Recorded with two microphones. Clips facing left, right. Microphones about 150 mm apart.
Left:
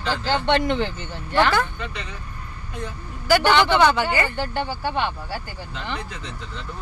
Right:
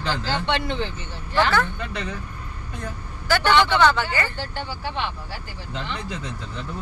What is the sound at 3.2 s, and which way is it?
A man's voice, 10° left (ahead or behind).